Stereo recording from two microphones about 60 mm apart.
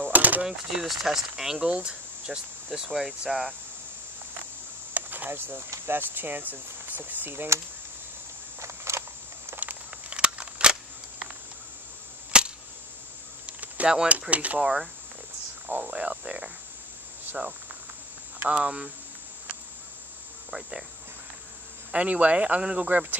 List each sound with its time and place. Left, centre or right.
0.0 s a sound: right
0.5 s speech: centre
2.9 s speech: centre
4.9 s cricket: right
5.9 s speech: right
8.5 s a sound: right
9.6 s a sound: right
12.3 s cap gun: centre
13.5 s cricket: right
13.9 s speech: right
14.6 s speech: centre
15.7 s cricket: right
18.5 s speech: centre
21.9 s speech: right